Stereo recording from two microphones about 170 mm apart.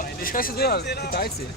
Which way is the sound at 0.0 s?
55° left (ahead or behind).